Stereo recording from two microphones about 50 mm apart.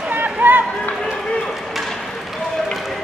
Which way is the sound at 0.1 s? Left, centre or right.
Right.